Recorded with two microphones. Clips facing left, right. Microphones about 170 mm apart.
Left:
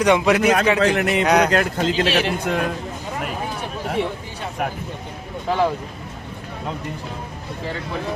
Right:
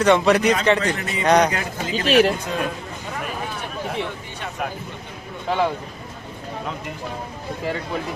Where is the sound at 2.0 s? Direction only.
50° right (ahead or behind).